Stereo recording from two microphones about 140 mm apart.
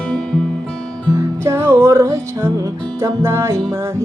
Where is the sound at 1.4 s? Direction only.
15° right (ahead or behind).